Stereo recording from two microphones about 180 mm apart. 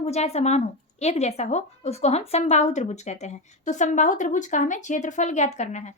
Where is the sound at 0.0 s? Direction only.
35° left (ahead or behind).